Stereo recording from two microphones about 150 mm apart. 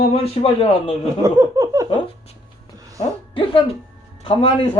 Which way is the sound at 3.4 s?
35° left (ahead or behind).